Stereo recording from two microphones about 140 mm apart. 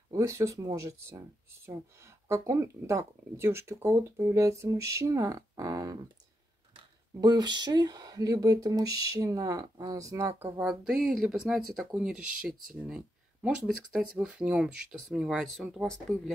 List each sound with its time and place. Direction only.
0.1 s speech: 20° right (ahead or behind)
7.2 s speech: 30° right (ahead or behind)
10.6 s speech: 5° right (ahead or behind)